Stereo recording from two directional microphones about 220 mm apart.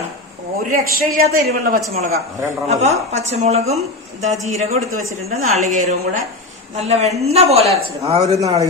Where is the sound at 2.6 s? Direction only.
30° right (ahead or behind).